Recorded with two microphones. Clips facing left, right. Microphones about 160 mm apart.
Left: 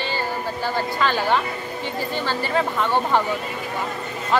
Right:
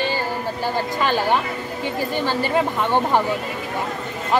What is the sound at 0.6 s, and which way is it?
A woman's voice, 15° right (ahead or behind).